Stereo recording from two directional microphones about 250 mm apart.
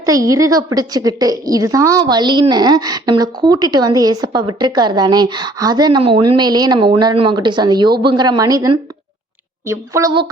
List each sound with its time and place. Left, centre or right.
0.0 s a woman's voice: centre